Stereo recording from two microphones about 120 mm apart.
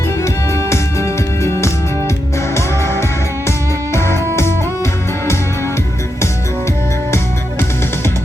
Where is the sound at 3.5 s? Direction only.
20° left (ahead or behind).